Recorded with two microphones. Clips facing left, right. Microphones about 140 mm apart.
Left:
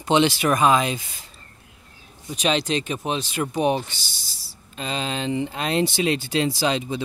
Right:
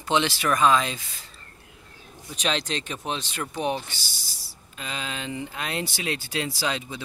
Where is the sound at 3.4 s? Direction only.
20° left (ahead or behind).